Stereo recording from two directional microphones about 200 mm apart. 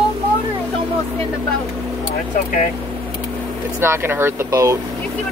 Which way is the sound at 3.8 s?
10° right (ahead or behind).